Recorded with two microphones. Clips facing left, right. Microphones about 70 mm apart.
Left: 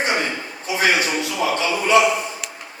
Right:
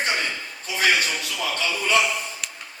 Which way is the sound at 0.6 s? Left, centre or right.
Left.